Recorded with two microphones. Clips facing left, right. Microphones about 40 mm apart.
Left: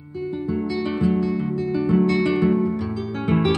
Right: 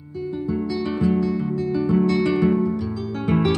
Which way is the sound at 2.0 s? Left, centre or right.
Left.